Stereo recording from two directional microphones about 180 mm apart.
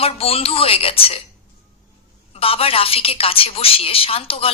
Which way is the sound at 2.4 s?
30° left (ahead or behind).